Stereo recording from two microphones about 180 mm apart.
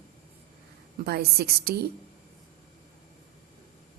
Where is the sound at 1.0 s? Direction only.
60° right (ahead or behind).